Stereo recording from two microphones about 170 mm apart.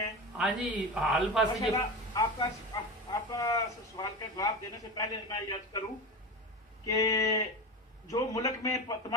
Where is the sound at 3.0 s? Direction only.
20° left (ahead or behind).